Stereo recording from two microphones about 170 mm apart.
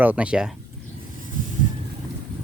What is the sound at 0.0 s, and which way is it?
Speech, 10° right (ahead or behind).